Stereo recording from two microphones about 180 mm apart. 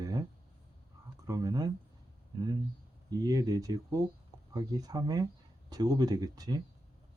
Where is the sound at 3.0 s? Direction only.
20° right (ahead or behind).